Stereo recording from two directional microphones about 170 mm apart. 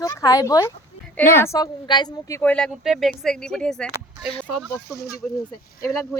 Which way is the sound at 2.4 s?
5° left (ahead or behind).